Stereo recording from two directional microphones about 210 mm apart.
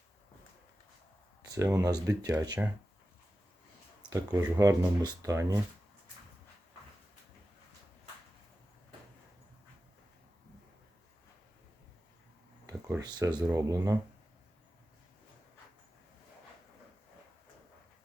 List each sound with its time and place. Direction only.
1.5 s speech: 15° right (ahead or behind)
4.1 s speech: 15° right (ahead or behind)
12.6 s speech: 15° right (ahead or behind)